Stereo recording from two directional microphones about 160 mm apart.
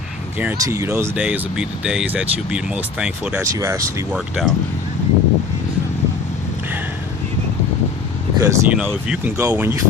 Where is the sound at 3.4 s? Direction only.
20° right (ahead or behind).